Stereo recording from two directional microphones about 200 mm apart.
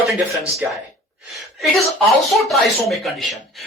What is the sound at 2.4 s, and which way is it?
Speech, centre (ahead or behind).